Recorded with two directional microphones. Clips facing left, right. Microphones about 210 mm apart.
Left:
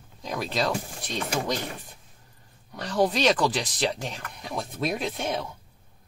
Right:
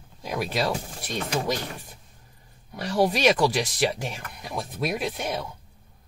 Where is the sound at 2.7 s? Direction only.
10° right (ahead or behind).